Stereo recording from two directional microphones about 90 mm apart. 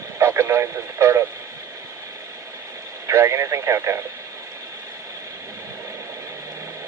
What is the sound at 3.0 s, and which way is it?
Radio, 30° right (ahead or behind).